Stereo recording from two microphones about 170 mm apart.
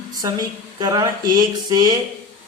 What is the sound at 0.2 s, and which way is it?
Speech, 20° right (ahead or behind).